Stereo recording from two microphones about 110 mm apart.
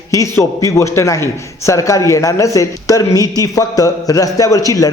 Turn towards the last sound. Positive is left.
turn(degrees=30)  # may be behind; listen again after turning